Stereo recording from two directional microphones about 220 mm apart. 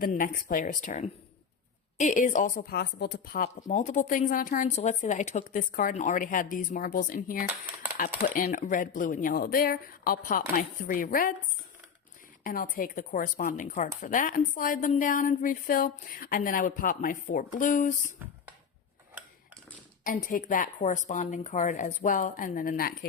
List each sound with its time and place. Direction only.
0.0 s speech: 35° left (ahead or behind)
7.4 s speech: 5° right (ahead or behind)
8.2 s speech: 40° left (ahead or behind)
12.4 s speech: 40° left (ahead or behind)
18.2 s speech: 10° right (ahead or behind)
20.1 s speech: 35° left (ahead or behind)